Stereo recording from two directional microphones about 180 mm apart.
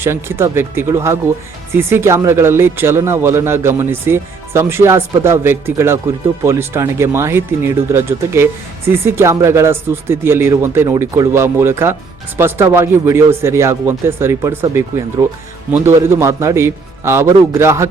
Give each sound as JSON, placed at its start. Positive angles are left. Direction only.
{"t": 0.0, "sound": "speech", "side_deg": -15}